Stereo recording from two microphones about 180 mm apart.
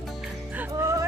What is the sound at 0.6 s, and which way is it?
Music, 15° right (ahead or behind).